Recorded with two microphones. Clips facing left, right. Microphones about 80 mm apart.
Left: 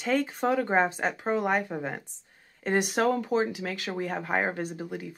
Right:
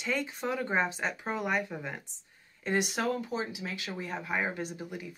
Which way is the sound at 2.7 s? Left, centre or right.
Left.